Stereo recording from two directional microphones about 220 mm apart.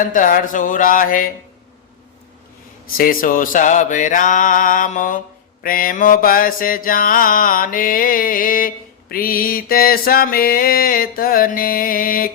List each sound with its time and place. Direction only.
0.0 s mantra: 35° left (ahead or behind)
3.0 s mantra: 40° left (ahead or behind)